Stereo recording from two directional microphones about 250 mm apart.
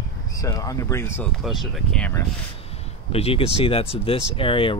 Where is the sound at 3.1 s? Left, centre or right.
Left.